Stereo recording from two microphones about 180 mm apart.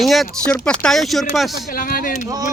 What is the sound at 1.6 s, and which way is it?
Speech, 50° left (ahead or behind).